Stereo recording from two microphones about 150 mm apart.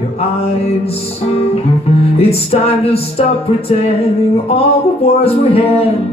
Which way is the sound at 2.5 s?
40° left (ahead or behind).